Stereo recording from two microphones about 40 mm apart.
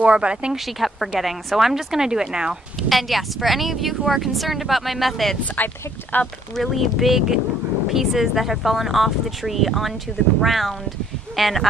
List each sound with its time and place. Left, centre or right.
0.0 s speech: right
0.7 s speech: centre
2.9 s speech: centre
5.6 s speech: left
6.5 s speech: centre